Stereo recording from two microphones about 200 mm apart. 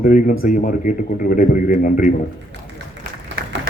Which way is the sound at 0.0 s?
40° left (ahead or behind).